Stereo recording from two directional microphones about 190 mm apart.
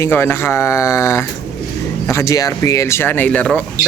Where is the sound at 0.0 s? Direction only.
10° left (ahead or behind).